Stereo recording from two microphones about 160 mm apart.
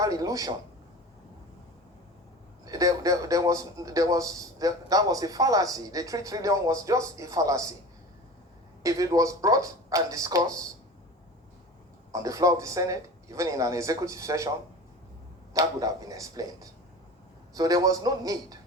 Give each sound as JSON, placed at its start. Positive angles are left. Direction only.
{"t": 0.0, "sound": "a man's voice", "side_deg": -20}
{"t": 2.6, "sound": "a man's voice", "side_deg": -20}
{"t": 8.8, "sound": "a man's voice", "side_deg": -20}
{"t": 12.1, "sound": "a man's voice", "side_deg": -20}
{"t": 15.5, "sound": "a man's voice", "side_deg": -20}